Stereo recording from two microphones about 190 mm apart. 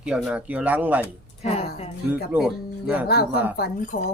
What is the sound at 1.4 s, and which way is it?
Speech, 35° left (ahead or behind).